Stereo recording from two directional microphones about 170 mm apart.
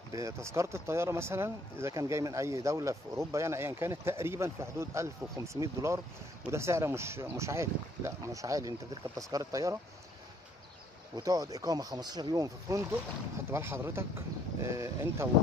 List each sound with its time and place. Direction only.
0.1 s speech: 20° right (ahead or behind)
11.1 s speech: 20° right (ahead or behind)